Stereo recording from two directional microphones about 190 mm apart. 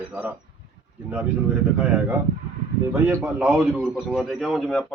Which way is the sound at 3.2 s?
5° right (ahead or behind).